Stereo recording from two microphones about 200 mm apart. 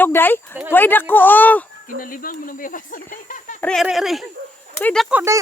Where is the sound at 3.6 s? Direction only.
5° left (ahead or behind).